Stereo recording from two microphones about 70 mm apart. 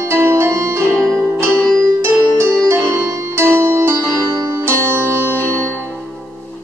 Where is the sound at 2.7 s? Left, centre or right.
Right.